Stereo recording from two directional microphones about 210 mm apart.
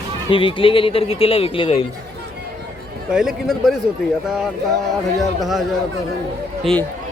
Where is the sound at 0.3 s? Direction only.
25° left (ahead or behind).